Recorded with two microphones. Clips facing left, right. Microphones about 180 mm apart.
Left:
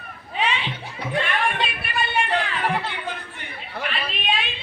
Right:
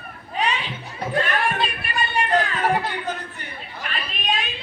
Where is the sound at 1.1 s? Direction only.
40° right (ahead or behind).